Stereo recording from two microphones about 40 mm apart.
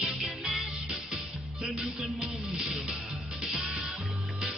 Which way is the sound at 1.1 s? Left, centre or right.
Centre.